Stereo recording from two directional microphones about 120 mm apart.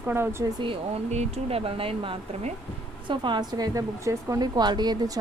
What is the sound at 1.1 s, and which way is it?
Speech, 65° right (ahead or behind).